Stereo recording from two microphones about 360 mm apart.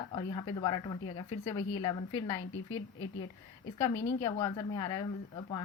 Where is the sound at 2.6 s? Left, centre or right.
Left.